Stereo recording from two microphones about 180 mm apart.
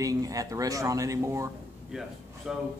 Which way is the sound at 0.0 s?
20° right (ahead or behind).